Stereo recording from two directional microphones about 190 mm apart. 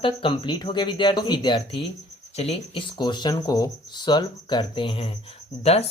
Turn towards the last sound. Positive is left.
turn(degrees=35)  # may be behind; listen again after turning